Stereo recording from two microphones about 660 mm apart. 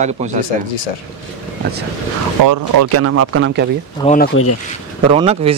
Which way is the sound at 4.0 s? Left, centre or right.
Centre.